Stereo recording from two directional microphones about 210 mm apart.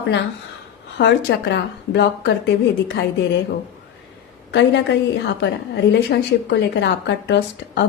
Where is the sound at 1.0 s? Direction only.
55° left (ahead or behind).